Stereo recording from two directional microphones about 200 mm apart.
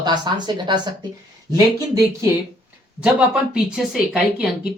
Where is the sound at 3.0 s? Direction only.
5° right (ahead or behind).